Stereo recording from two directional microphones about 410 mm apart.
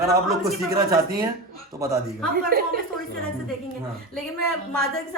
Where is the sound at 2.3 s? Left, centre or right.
Right.